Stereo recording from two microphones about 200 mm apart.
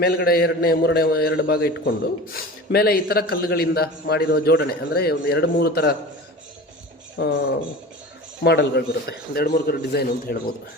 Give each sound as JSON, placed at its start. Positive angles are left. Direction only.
{"t": 0.0, "sound": "a man's voice", "side_deg": 50}
{"t": 7.2, "sound": "a man's voice", "side_deg": 50}
{"t": 8.4, "sound": "a man's voice", "side_deg": 55}